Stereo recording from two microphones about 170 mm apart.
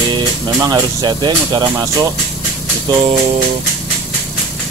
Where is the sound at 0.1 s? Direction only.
25° right (ahead or behind).